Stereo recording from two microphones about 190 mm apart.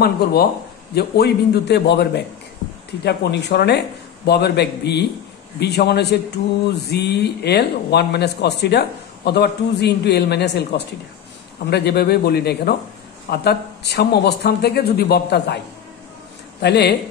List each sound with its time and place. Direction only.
0.0 s a man's voice: 55° left (ahead or behind)
11.7 s a man's voice: 60° left (ahead or behind)
16.6 s a man's voice: 60° left (ahead or behind)